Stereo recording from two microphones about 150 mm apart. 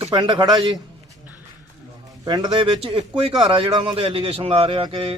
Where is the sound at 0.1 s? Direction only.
30° right (ahead or behind).